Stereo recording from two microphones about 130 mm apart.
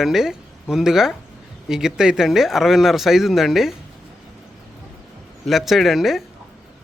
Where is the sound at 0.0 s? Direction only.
5° right (ahead or behind).